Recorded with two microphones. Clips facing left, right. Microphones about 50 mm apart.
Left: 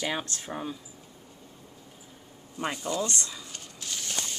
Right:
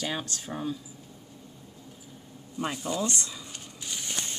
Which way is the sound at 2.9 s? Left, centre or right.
Centre.